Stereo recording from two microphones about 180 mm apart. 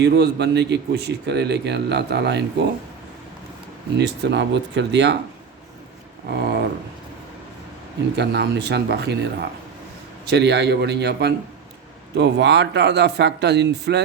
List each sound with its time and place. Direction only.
0.0 s speech: 70° right (ahead or behind)
3.9 s speech: 70° right (ahead or behind)
8.1 s speech: 70° right (ahead or behind)